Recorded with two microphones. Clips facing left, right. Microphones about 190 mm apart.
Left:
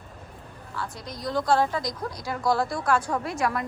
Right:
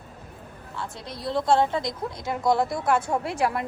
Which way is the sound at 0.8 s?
30° right (ahead or behind).